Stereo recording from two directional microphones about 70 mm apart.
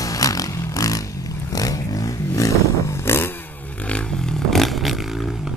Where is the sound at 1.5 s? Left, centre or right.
Left.